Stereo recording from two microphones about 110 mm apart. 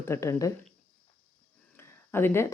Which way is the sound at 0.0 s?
25° left (ahead or behind).